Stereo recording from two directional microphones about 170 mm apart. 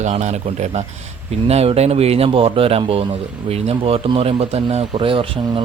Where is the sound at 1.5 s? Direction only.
35° right (ahead or behind).